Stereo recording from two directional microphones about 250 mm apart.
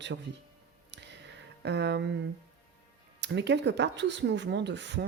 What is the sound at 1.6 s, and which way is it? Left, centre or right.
Speech, right.